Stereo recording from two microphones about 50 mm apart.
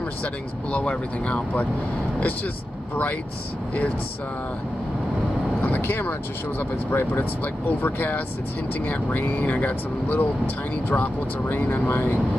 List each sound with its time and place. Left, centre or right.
0.2 s speech: left
5.8 s speech: left